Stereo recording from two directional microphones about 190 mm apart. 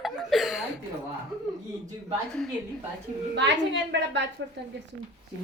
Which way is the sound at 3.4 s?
70° right (ahead or behind).